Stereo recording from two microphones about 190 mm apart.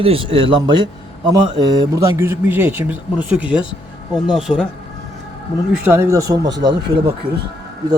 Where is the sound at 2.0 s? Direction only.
15° right (ahead or behind).